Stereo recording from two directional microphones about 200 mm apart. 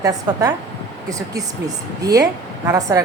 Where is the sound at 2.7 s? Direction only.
15° right (ahead or behind).